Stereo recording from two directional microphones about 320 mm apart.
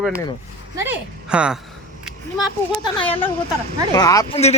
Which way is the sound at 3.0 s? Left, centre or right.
Centre.